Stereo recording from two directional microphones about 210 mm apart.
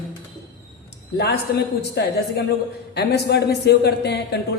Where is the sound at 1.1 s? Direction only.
50° left (ahead or behind).